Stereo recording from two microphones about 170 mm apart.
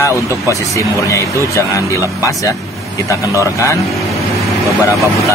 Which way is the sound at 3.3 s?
20° left (ahead or behind).